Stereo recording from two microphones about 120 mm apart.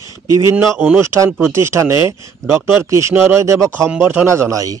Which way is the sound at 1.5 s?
20° right (ahead or behind).